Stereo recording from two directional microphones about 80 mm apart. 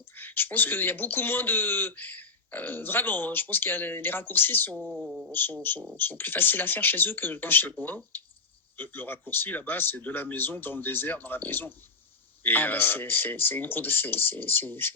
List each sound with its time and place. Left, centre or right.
0.2 s speech: left
4.8 s speech: centre
5.3 s speech: left